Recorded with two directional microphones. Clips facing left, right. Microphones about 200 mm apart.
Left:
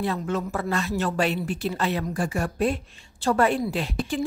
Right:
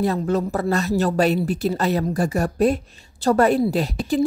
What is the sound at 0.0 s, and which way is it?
A woman's voice, 40° right (ahead or behind).